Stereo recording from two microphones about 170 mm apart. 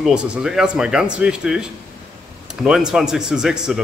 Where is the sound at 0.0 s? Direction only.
5° right (ahead or behind).